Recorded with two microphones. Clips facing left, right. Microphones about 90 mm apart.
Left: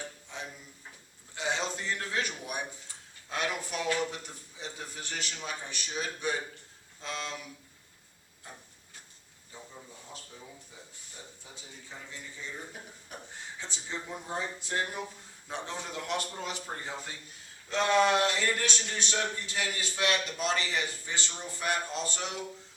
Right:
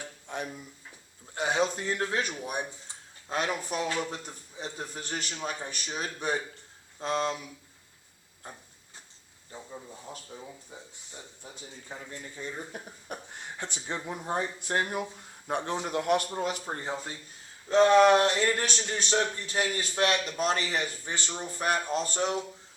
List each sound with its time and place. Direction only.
0.3 s a sound: 55° right (ahead or behind)
1.4 s a man's voice: 50° right (ahead or behind)
2.0 s a man's voice: 40° right (ahead or behind)
10.3 s a man's voice: 30° right (ahead or behind)
11.9 s a man's voice: 50° right (ahead or behind)
13.1 s a man's voice: 60° right (ahead or behind)
16.6 s speech: 30° right (ahead or behind)
17.7 s a man's voice: 40° right (ahead or behind)